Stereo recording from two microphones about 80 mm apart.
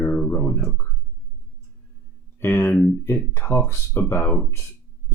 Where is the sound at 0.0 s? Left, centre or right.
Left.